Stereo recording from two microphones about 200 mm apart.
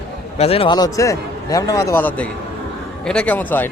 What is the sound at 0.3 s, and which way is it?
A man's voice, 30° left (ahead or behind).